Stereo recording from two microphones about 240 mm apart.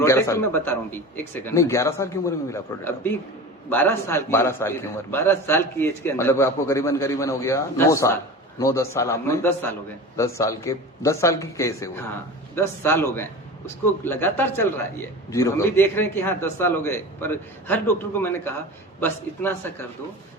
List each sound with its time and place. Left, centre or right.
0.0 s a man's voice: centre